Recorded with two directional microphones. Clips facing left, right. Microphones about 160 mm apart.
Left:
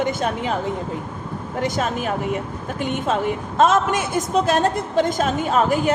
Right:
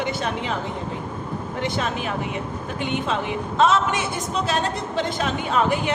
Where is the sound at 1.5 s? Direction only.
45° left (ahead or behind).